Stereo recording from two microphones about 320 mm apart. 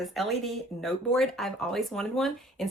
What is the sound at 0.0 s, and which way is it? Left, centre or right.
Speech, centre.